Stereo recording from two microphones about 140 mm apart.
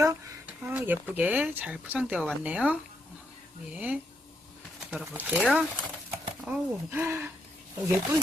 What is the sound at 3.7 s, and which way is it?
Speech, 10° right (ahead or behind).